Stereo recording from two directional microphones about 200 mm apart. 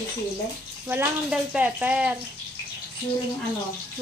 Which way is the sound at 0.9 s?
5° right (ahead or behind).